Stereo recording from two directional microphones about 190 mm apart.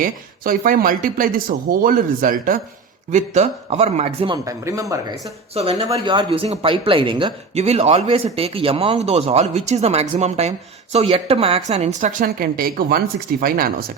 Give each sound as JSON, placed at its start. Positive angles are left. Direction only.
{"t": 0.0, "sound": "speech", "side_deg": -45}
{"t": 4.4, "sound": "speech", "side_deg": -15}